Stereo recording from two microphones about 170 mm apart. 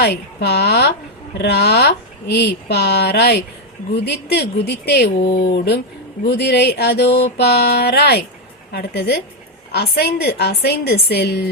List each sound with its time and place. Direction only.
0.0 s speech: 70° left (ahead or behind)
6.2 s speech: 75° left (ahead or behind)